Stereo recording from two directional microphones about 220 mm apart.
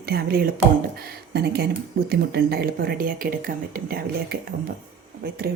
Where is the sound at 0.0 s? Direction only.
45° right (ahead or behind).